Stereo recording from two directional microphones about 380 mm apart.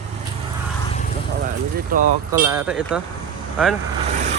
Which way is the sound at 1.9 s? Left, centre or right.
Right.